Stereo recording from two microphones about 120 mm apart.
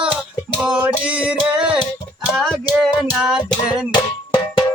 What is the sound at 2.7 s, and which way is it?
Music, 5° left (ahead or behind).